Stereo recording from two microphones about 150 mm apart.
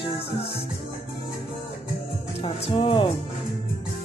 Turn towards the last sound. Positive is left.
turn(degrees=35)  # may be behind; listen again after turning